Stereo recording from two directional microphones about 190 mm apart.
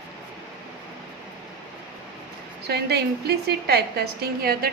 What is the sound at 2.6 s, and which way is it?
A woman's voice, 60° right (ahead or behind).